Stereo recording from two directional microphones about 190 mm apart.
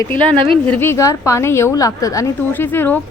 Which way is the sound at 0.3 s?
25° right (ahead or behind).